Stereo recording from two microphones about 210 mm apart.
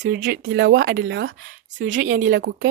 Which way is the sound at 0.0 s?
40° right (ahead or behind).